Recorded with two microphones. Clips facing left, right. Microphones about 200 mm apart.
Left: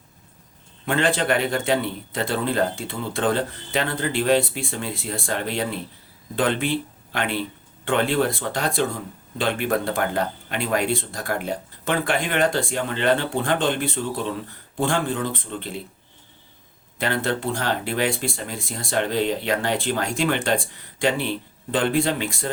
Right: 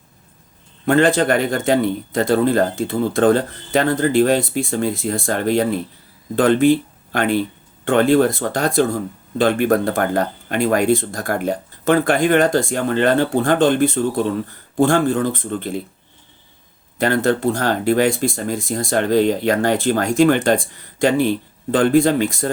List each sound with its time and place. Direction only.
0.9 s speech: 45° right (ahead or behind)
17.0 s speech: 45° right (ahead or behind)